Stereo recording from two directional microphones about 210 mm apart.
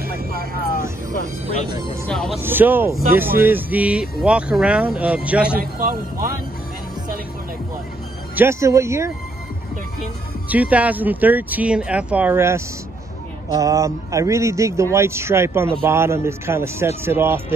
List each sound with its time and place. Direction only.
0.0 s vehicle: 45° right (ahead or behind)
2.0 s speech: centre (ahead or behind)
2.4 s a man's voice: 10° right (ahead or behind)
5.6 s a man's voice: 45° right (ahead or behind)
8.4 s a man's voice: 15° right (ahead or behind)
10.5 s a man's voice: 5° right (ahead or behind)